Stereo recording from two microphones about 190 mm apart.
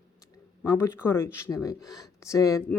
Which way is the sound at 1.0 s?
10° left (ahead or behind).